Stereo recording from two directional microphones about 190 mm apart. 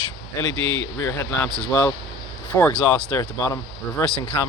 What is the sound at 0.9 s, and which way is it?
Speech, 15° left (ahead or behind).